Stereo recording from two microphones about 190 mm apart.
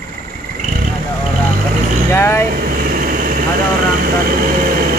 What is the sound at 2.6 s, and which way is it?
Vehicle, 50° right (ahead or behind).